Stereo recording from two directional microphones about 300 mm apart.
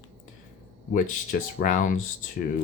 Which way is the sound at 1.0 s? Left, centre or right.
Left.